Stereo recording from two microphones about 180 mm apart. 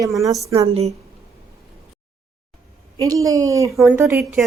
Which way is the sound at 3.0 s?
20° right (ahead or behind).